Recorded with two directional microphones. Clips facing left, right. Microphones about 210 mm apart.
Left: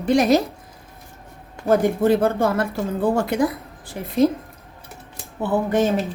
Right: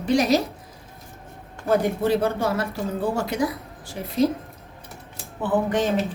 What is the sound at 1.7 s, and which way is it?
Speech, 50° left (ahead or behind).